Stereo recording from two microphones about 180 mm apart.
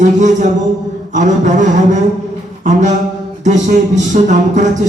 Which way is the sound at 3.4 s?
40° right (ahead or behind).